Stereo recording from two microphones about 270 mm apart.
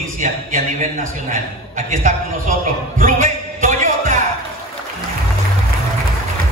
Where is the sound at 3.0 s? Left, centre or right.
Right.